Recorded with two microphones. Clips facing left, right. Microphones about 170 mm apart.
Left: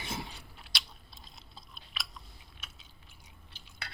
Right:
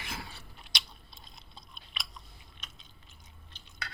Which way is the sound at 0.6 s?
5° left (ahead or behind).